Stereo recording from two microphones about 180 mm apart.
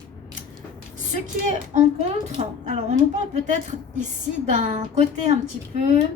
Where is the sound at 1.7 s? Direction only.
40° right (ahead or behind).